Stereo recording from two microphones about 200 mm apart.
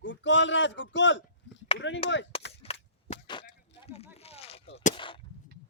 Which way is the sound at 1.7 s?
65° left (ahead or behind).